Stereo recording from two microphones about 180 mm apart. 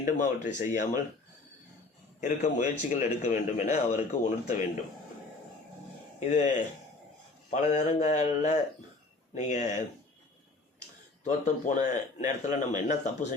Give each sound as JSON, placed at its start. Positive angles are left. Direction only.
{"t": 0.0, "sound": "a man's voice", "side_deg": 45}
{"t": 2.2, "sound": "a man's voice", "side_deg": 40}
{"t": 6.1, "sound": "a man's voice", "side_deg": 40}
{"t": 7.5, "sound": "a man's voice", "side_deg": 40}
{"t": 11.2, "sound": "a man's voice", "side_deg": 40}